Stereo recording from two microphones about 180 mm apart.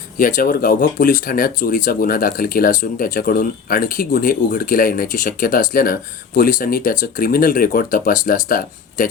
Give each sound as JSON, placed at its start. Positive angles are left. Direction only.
{"t": 0.2, "sound": "speech", "side_deg": 50}